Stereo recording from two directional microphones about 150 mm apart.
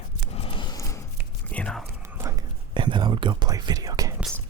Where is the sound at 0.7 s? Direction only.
20° left (ahead or behind).